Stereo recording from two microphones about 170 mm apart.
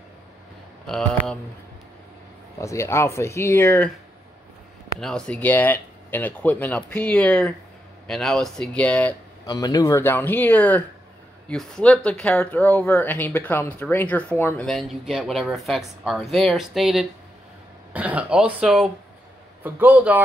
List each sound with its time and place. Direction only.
0.8 s speech: 5° left (ahead or behind)
2.6 s speech: 15° left (ahead or behind)
5.0 s speech: 5° left (ahead or behind)
9.5 s speech: 20° left (ahead or behind)
14.7 s a man's voice: centre (ahead or behind)